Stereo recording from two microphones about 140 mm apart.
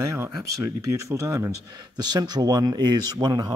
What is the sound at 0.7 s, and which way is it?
Speech, 25° right (ahead or behind).